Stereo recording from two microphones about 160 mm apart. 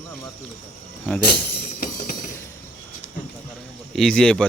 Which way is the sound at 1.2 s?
80° left.